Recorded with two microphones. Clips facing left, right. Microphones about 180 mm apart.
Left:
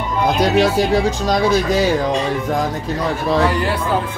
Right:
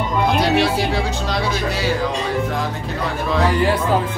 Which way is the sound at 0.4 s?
45° left (ahead or behind).